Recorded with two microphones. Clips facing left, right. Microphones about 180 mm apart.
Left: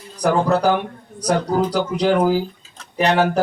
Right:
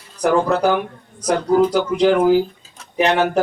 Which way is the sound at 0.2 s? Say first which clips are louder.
Right 1 dB; 35° left (ahead or behind).